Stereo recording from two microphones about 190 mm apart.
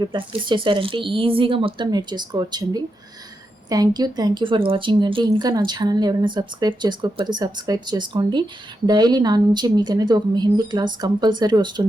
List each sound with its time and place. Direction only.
0.0 s a woman's voice: 25° right (ahead or behind)